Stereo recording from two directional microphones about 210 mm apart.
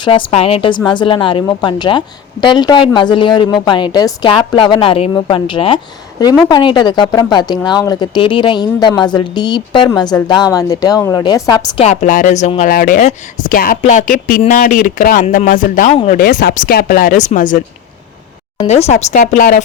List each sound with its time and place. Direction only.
0.0 s a woman's voice: 25° left (ahead or behind)
11.9 s speech: 35° left (ahead or behind)
16.2 s speech: 45° left (ahead or behind)
18.6 s speech: 30° left (ahead or behind)